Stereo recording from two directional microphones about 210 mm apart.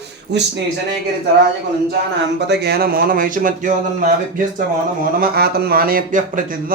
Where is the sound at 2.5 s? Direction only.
50° right (ahead or behind).